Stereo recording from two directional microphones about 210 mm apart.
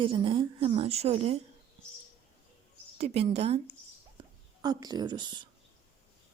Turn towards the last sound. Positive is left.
turn(degrees=-20)  # may be behind; listen again after turning